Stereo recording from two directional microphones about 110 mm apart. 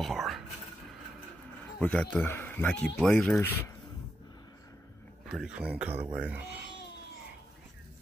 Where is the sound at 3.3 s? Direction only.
25° left (ahead or behind).